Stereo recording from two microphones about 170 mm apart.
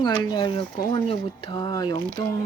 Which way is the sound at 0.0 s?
25° left (ahead or behind).